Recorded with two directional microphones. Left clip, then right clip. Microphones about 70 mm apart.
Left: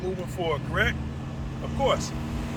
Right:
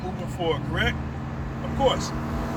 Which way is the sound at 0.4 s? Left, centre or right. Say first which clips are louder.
Right 1 dB; left.